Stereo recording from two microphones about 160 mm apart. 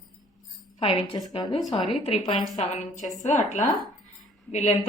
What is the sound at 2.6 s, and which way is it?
A woman's voice, 45° left (ahead or behind).